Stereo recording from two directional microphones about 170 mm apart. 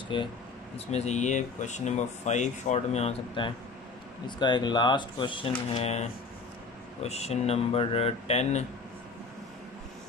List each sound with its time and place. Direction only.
0.1 s speech: 30° left (ahead or behind)
0.7 s speech: 40° left (ahead or behind)